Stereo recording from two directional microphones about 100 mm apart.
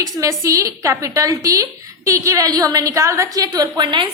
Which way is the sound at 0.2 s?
30° right (ahead or behind).